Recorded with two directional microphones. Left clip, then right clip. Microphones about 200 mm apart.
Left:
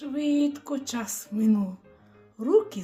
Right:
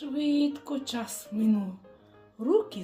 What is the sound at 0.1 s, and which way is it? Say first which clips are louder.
Speech: left 2 dB; 20° left (ahead or behind).